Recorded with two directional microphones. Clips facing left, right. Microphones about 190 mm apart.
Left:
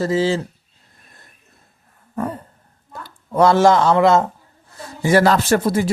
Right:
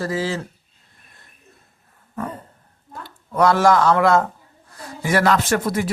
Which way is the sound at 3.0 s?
30° left (ahead or behind).